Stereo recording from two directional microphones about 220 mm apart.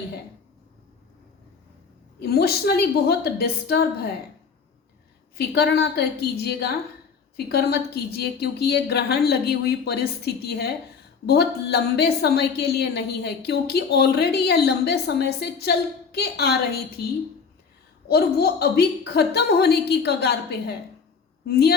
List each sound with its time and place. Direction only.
2.2 s a woman's voice: 45° left (ahead or behind)
5.4 s a woman's voice: 45° left (ahead or behind)
18.1 s a woman's voice: 45° left (ahead or behind)